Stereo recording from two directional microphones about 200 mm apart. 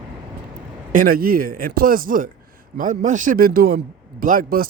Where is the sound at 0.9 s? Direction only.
45° right (ahead or behind).